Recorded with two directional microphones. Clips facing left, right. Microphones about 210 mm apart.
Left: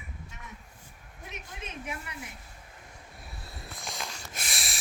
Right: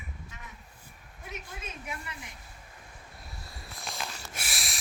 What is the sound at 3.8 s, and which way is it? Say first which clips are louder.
Snort: right 1 dB; 5° right (ahead or behind).